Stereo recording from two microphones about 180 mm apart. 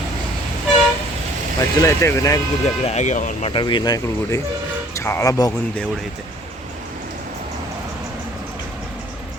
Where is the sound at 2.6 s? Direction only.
35° left (ahead or behind).